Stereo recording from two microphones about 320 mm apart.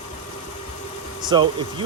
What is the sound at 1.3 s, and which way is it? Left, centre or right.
Speech, centre.